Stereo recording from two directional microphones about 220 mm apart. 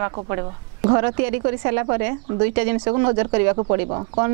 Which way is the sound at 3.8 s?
25° right (ahead or behind).